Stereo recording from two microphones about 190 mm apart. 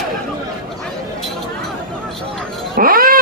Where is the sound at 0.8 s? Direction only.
Centre (ahead or behind).